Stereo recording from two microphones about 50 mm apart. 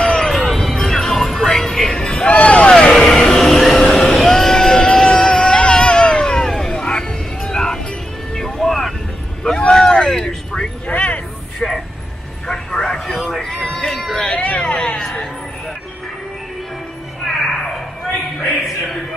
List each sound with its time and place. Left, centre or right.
0.0 s music: centre
0.3 s music: centre
0.7 s music: centre
2.3 s a sound: left
3.1 s music: centre
8.4 s vehicle: centre
9.6 s vehicle: centre
10.9 s vehicle: left
11.6 s vehicle: centre
13.7 s a sound: centre
14.4 s a sound: left